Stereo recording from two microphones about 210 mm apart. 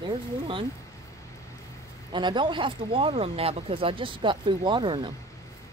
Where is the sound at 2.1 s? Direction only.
20° right (ahead or behind).